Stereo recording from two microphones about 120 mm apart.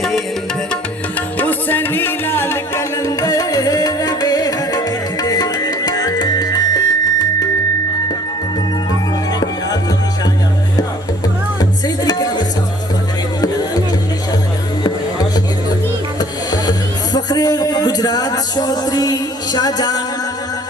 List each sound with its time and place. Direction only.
1.4 s music: 15° left (ahead or behind); by 7.3 s 35° left (ahead or behind)
11.6 s music: 35° left (ahead or behind)
16.5 s music: 35° left (ahead or behind)